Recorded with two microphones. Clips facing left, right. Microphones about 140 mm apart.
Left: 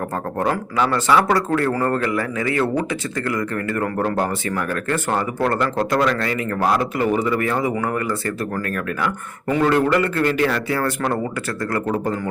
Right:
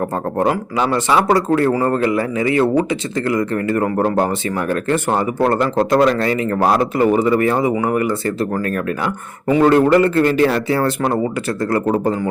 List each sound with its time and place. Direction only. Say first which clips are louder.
0.3 s a man's voice: right 3 dB; 20° right (ahead or behind)